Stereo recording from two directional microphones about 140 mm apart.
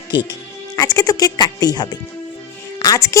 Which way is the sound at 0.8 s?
25° left (ahead or behind).